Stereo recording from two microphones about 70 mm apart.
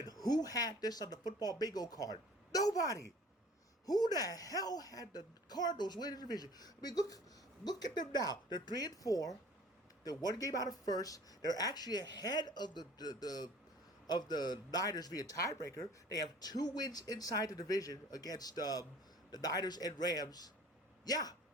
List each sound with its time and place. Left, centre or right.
0.0 s speech: left
3.8 s speech: left
7.6 s speech: left
10.0 s speech: left